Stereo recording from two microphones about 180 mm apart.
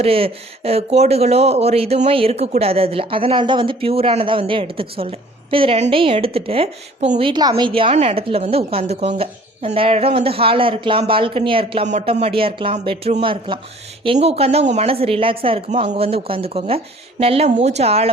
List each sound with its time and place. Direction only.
0.0 s speech: 30° right (ahead or behind)